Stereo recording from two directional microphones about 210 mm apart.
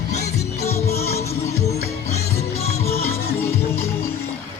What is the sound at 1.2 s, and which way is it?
Music, 30° left (ahead or behind).